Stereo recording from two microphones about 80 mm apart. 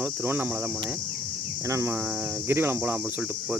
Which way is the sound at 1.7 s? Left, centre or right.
Right.